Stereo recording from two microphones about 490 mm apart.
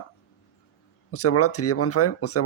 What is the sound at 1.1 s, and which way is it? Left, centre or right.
Speech, left.